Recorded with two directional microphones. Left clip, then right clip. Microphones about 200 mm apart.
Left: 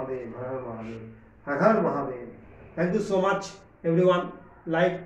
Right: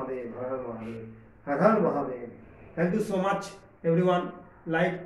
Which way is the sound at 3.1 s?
15° right (ahead or behind).